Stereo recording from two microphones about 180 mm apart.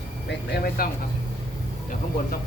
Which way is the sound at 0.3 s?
60° left (ahead or behind).